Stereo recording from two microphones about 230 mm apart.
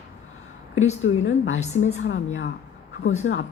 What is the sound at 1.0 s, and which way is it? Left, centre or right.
Speech, left.